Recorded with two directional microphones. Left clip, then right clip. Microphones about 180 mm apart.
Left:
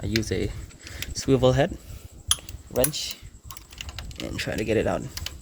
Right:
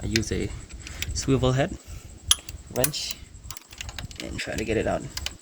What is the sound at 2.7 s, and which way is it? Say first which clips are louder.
Speech: left 2 dB; 65° left (ahead or behind).